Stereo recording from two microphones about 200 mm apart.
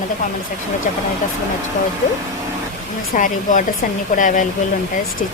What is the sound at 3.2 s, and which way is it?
Speech, 40° left (ahead or behind).